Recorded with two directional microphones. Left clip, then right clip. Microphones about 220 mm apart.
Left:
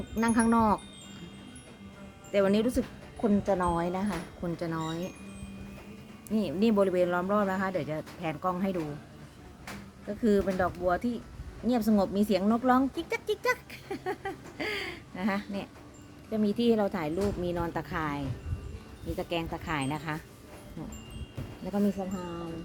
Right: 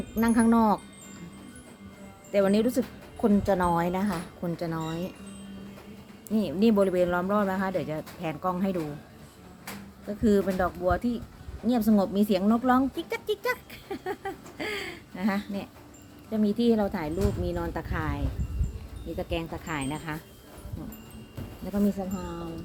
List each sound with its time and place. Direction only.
0.2 s a woman's voice: 10° right (ahead or behind)
2.3 s a woman's voice: 10° right (ahead or behind)
6.2 s a woman's voice: 10° right (ahead or behind)
10.1 s a woman's voice: 10° right (ahead or behind); by 20.2 s 10° left (ahead or behind)
21.7 s speech: 5° left (ahead or behind)